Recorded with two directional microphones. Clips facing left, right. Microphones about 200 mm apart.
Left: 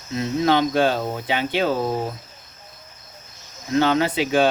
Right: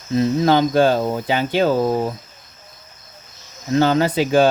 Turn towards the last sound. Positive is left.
turn(degrees=-40)  # may be behind; listen again after turning